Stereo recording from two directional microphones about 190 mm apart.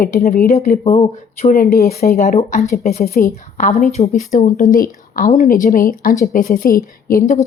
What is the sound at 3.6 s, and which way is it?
Speech, 40° left (ahead or behind).